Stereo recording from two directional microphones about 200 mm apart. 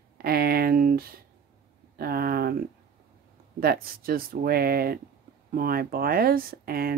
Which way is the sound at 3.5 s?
50° right (ahead or behind).